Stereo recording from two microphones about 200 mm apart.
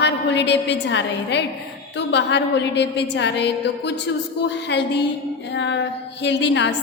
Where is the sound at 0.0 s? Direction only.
60° left (ahead or behind).